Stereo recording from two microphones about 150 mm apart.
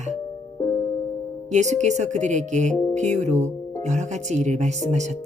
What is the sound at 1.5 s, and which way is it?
Speech, 50° right (ahead or behind).